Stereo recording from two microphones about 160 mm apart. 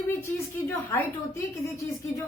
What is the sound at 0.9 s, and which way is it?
A woman's voice, 15° left (ahead or behind).